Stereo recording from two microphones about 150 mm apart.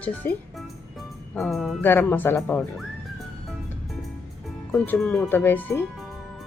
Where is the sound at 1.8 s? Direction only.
10° left (ahead or behind).